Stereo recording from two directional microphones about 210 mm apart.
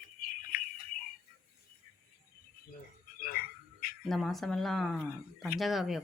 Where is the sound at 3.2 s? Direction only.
45° left (ahead or behind).